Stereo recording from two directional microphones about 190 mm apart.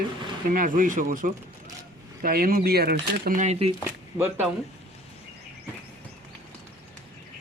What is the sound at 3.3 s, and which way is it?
Speech, 35° right (ahead or behind).